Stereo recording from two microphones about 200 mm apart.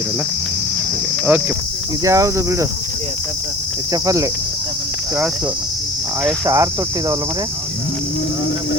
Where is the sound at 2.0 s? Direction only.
15° right (ahead or behind).